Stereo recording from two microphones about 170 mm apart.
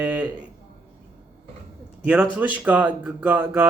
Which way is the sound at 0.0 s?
10° right (ahead or behind).